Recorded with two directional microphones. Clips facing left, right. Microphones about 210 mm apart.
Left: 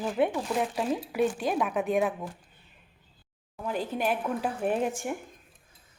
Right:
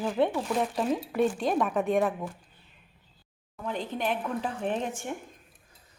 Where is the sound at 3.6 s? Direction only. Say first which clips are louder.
Left 2 dB; 5° left (ahead or behind).